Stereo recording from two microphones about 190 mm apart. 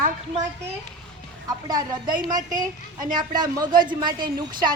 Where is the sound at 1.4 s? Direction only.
20° right (ahead or behind).